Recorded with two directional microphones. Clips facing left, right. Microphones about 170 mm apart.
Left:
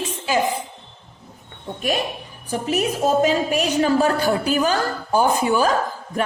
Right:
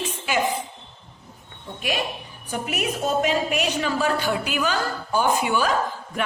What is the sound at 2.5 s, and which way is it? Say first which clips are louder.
A woman's voice: left 5 dB; 35° left (ahead or behind).